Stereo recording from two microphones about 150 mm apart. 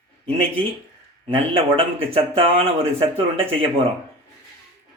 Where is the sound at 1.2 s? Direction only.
40° right (ahead or behind).